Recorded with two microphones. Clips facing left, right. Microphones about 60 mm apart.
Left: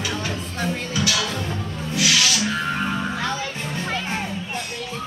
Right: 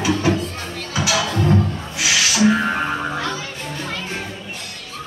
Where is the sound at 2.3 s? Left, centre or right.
Right.